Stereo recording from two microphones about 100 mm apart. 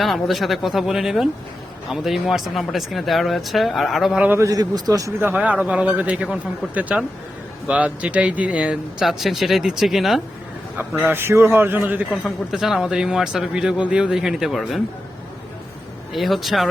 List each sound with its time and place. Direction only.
0.0 s speech: centre (ahead or behind)
4.4 s speech: 35° right (ahead or behind)
5.2 s a man's voice: 15° right (ahead or behind)
10.8 s a man's voice: 15° right (ahead or behind)
12.5 s speech: 5° right (ahead or behind)
16.1 s speech: centre (ahead or behind)